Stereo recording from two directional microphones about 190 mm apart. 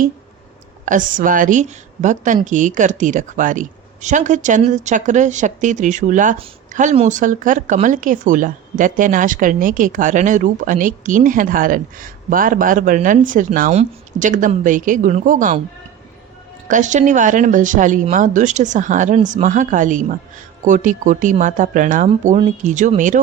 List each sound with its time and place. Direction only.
0.9 s a woman's voice: 45° right (ahead or behind)
16.6 s a woman's voice: 40° right (ahead or behind)